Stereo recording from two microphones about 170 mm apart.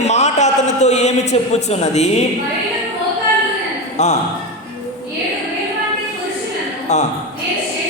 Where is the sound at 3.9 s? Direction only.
40° left (ahead or behind).